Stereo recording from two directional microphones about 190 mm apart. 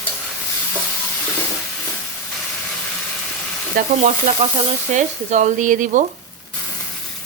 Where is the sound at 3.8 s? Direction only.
50° right (ahead or behind).